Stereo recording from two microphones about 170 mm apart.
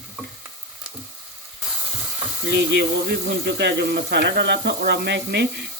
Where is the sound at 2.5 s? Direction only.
75° right (ahead or behind).